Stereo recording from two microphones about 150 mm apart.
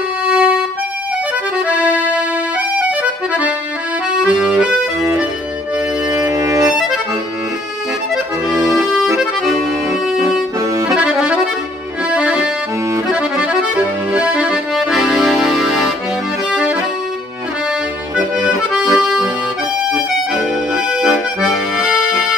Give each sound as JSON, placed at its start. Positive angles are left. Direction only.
{"t": 0.3, "sound": "music", "side_deg": -10}
{"t": 1.7, "sound": "accordion", "side_deg": -10}
{"t": 6.1, "sound": "music", "side_deg": -20}
{"t": 8.7, "sound": "accordion", "side_deg": 0}
{"t": 11.0, "sound": "accordion", "side_deg": -5}
{"t": 14.1, "sound": "accordion", "side_deg": -5}
{"t": 18.1, "sound": "accordion", "side_deg": -5}
{"t": 21.4, "sound": "accordion", "side_deg": -5}